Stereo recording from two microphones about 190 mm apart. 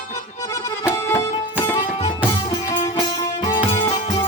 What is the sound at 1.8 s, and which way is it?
Music, 30° left (ahead or behind).